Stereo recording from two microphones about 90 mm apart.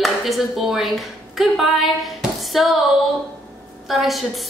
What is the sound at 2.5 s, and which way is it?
Speech, centre (ahead or behind).